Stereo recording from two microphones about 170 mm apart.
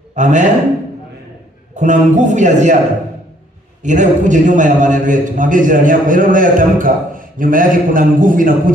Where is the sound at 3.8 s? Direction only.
45° right (ahead or behind).